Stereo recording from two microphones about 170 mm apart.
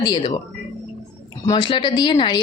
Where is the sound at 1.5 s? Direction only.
30° left (ahead or behind).